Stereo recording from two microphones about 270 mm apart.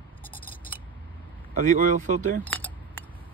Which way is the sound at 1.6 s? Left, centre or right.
Right.